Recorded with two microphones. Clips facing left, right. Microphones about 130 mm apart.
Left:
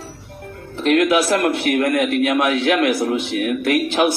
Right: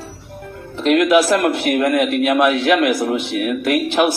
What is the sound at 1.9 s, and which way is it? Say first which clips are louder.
Speech: right 1 dB; 20° right (ahead or behind).